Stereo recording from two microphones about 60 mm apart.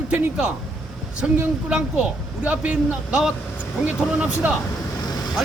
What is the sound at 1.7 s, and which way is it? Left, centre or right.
A man's voice, right.